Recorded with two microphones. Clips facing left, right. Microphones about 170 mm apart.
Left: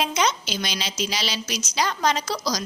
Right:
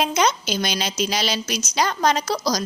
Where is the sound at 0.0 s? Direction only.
45° right (ahead or behind).